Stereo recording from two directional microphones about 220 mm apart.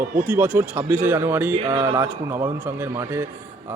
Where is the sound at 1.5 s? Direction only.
25° right (ahead or behind).